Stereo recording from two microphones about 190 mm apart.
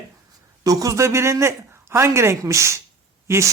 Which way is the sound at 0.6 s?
20° right (ahead or behind).